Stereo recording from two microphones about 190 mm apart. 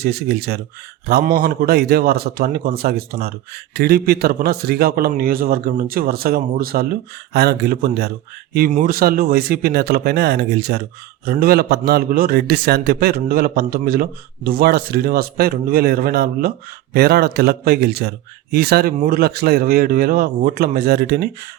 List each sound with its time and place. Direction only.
0.0 s a man's voice: 55° right (ahead or behind)